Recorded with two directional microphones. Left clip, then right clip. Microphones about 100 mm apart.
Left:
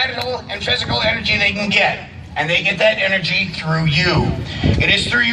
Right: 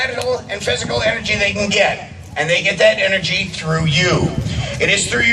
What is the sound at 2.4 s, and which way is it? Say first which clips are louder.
A man's voice: right 2 dB; 40° right (ahead or behind).